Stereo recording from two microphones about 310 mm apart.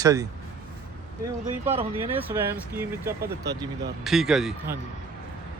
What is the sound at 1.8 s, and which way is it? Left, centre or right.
Speech, centre.